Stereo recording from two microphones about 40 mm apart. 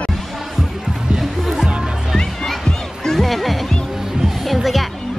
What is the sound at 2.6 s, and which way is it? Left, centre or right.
Music, centre.